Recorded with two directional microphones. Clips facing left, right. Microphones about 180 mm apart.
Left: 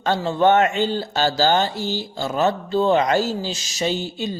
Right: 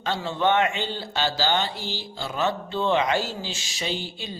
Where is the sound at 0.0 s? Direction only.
45° left (ahead or behind).